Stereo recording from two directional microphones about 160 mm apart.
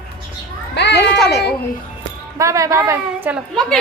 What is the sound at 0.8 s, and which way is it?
Speech, 90° left.